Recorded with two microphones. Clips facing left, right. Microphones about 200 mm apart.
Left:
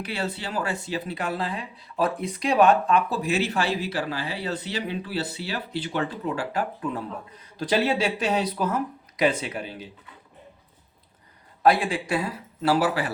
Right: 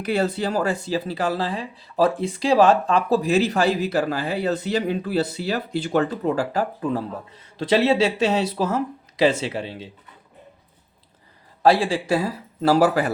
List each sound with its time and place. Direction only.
0.0 s speech: 45° right (ahead or behind); by 9.9 s 25° right (ahead or behind)
11.6 s speech: 30° right (ahead or behind)